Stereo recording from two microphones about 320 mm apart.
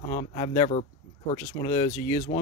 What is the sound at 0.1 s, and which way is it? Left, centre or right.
Speech, centre.